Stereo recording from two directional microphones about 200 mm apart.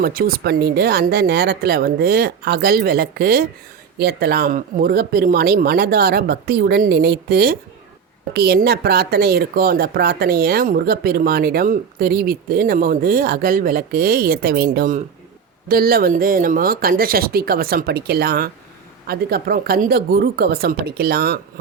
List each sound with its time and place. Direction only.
0.0 s a woman's voice: 50° right (ahead or behind)